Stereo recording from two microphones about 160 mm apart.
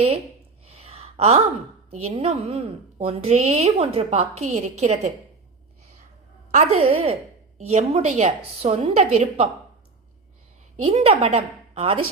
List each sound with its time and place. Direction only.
0.6 s sigh: 40° right (ahead or behind)
1.9 s a woman's voice: 40° right (ahead or behind)
6.5 s a woman's voice: 45° right (ahead or behind)
10.8 s a woman's voice: 40° right (ahead or behind)